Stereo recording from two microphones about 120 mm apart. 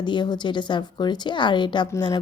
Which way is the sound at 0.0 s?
40° left (ahead or behind).